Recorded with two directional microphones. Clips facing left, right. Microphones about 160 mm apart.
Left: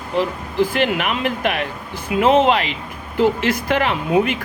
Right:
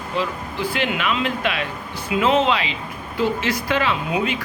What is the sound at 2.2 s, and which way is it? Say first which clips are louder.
Speech: left 4 dB; 55° left (ahead or behind).